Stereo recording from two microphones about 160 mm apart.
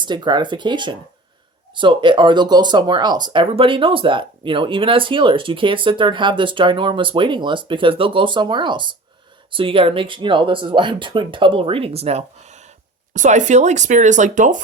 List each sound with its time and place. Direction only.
0.0 s speech: 30° right (ahead or behind); by 14.6 s 50° right (ahead or behind)